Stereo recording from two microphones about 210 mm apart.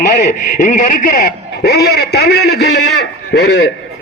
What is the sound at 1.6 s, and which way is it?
Speech, 50° left (ahead or behind).